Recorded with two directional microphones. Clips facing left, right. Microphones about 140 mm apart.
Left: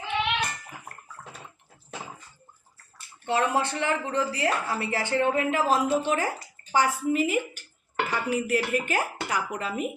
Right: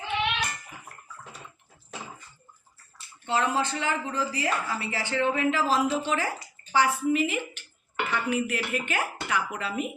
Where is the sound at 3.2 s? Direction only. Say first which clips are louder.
Left 1 dB; 55° left (ahead or behind).